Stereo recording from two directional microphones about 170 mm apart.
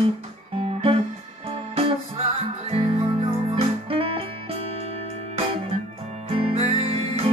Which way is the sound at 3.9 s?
35° right (ahead or behind).